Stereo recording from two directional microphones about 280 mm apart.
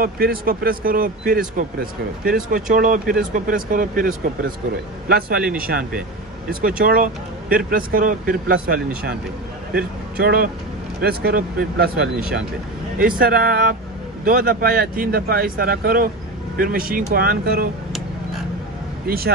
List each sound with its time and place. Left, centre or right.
0.0 s speech: right
10.1 s speech: right
13.2 s speech: right
19.0 s speech: right